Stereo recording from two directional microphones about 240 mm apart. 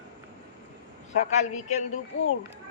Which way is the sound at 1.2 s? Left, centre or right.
Left.